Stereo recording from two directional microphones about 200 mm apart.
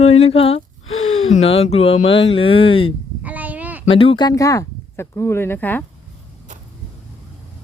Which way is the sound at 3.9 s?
25° left (ahead or behind).